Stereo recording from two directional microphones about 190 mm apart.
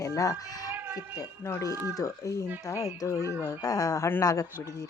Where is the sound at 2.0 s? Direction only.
15° left (ahead or behind).